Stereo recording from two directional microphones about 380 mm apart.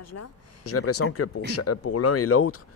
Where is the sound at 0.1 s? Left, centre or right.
Left.